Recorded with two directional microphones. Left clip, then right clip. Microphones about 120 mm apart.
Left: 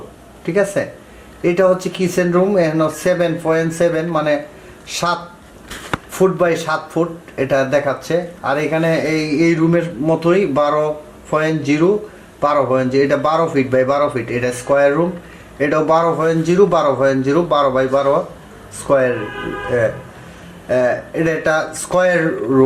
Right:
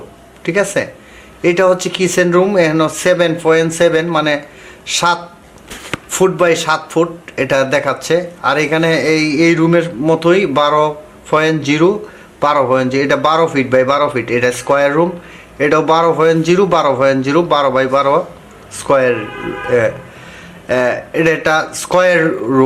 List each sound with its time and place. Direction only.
0.4 s speech: 40° right (ahead or behind)
6.1 s speech: 40° right (ahead or behind)
20.7 s speech: 40° right (ahead or behind)